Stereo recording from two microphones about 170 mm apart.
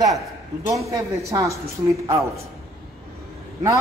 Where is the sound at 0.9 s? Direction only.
20° right (ahead or behind).